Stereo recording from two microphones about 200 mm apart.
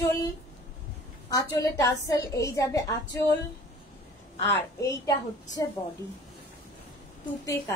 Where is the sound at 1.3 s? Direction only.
20° left (ahead or behind).